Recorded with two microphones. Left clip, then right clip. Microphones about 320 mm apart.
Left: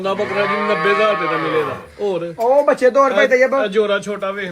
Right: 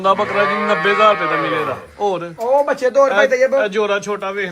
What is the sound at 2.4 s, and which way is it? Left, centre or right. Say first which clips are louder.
A man's voice: left 3 dB; left.